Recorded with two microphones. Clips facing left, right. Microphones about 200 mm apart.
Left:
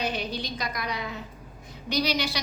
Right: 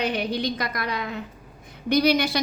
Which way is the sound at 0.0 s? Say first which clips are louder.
Right 6 dB; 60° right (ahead or behind).